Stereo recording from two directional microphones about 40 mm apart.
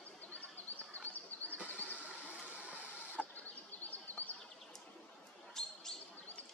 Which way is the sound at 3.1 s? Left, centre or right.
Left.